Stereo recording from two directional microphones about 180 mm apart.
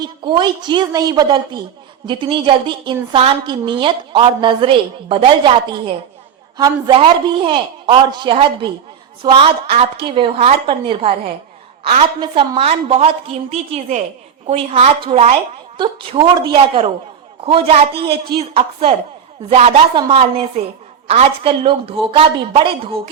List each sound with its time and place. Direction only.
0.0 s a woman's voice: 25° right (ahead or behind)
12.2 s a woman's voice: 30° right (ahead or behind)
15.8 s a woman's voice: 25° right (ahead or behind)